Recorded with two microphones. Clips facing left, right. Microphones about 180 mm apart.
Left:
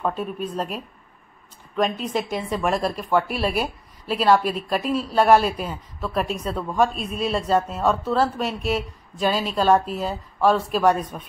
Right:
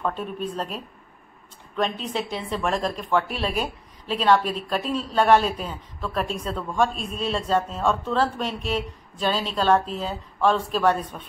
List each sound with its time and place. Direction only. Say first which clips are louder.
0.0 s speech: left 2 dB; 10° left (ahead or behind)